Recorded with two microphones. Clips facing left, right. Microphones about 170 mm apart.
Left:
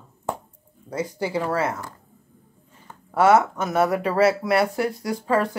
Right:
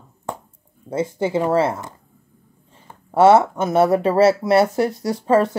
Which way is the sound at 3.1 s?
25° right (ahead or behind).